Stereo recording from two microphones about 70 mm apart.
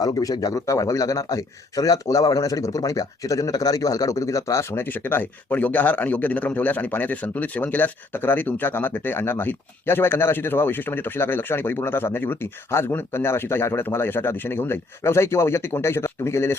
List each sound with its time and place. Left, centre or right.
0.0 s a man's voice: left
0.7 s a man's voice: left
4.9 s a man's voice: left